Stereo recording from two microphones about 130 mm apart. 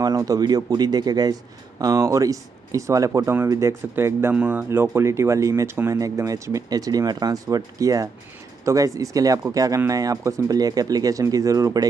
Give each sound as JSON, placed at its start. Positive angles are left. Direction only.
{"t": 0.0, "sound": "speech", "side_deg": -30}